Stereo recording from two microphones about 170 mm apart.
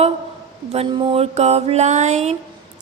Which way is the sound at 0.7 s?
30° right (ahead or behind).